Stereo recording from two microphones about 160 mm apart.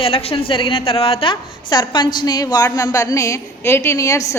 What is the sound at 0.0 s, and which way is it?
A woman's voice, 35° left (ahead or behind).